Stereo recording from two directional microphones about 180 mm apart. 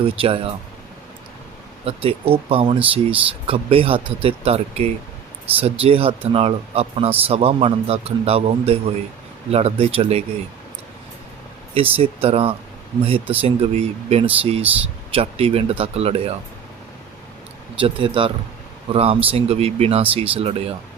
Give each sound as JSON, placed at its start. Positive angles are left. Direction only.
{"t": 0.0, "sound": "speech", "side_deg": -30}
{"t": 1.8, "sound": "speech", "side_deg": -30}
{"t": 11.7, "sound": "speech", "side_deg": -35}
{"t": 17.7, "sound": "speech", "side_deg": -30}